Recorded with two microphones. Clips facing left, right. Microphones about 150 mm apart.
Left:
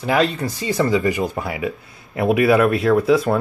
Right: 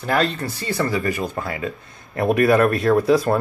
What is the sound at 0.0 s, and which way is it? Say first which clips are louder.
Speech: left 2 dB; 15° left (ahead or behind).